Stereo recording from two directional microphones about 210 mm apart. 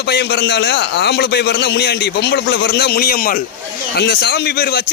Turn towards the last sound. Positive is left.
turn(degrees=50)  # may be behind; listen again after turning